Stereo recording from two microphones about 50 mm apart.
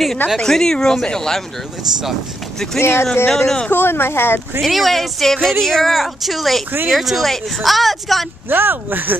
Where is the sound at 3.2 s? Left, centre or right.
Centre.